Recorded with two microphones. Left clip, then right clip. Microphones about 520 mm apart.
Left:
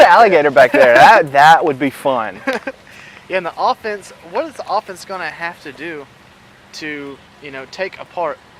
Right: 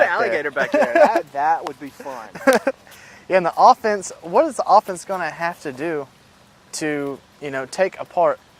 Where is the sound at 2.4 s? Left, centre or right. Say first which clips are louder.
Right 5 dB; right.